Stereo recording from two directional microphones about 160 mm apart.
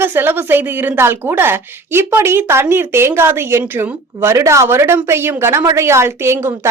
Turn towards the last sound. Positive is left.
turn(degrees=-15)  # may be behind; listen again after turning